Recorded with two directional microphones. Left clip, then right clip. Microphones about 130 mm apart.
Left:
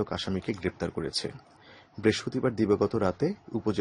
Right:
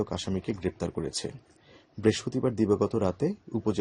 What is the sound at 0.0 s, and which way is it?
A man's voice, 20° right (ahead or behind).